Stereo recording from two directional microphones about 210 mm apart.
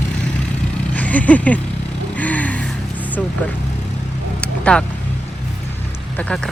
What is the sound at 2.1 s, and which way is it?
Vehicle, 5° left (ahead or behind).